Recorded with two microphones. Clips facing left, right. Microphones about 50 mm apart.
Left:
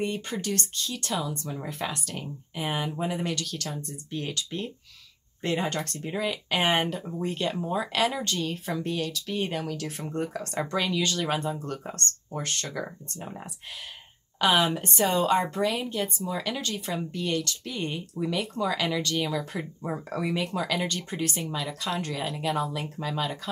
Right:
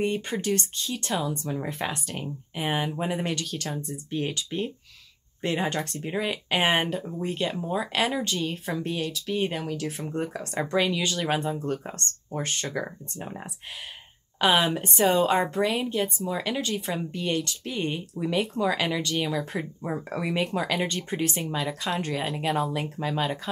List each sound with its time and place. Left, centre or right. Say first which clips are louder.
0.0 s speech: right 3 dB; centre
14.4 s speech: right 1 dB; centre
20.3 s speech: right 4 dB; right